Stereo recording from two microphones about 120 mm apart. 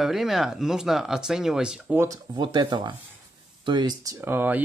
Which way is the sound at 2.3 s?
40° right (ahead or behind).